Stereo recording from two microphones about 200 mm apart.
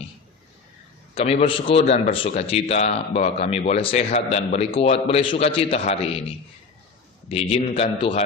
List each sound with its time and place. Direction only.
1.1 s a man's voice: 30° left (ahead or behind)
7.5 s a man's voice: 30° left (ahead or behind)